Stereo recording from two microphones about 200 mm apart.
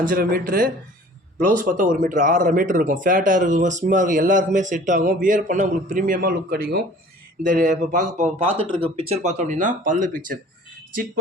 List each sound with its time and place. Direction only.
0.0 s speech: 45° right (ahead or behind)